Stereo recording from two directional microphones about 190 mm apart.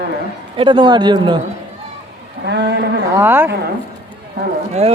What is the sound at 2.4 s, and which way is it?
Speech, 65° right (ahead or behind).